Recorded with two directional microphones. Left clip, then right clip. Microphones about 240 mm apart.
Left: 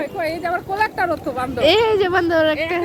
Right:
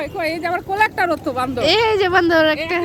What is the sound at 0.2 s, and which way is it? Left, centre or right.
Speech, right.